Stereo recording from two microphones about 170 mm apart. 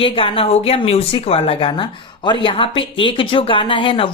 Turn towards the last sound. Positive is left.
turn(degrees=30)  # may be behind; listen again after turning